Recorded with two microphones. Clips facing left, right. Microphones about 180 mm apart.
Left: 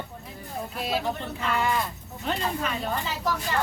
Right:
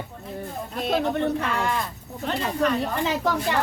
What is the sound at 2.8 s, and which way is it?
Speech, 75° right (ahead or behind).